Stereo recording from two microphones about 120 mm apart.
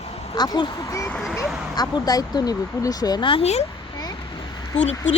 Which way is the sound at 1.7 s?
35° left (ahead or behind).